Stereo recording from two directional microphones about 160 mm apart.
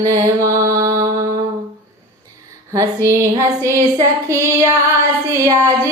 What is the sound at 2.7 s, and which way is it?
Music, 20° right (ahead or behind).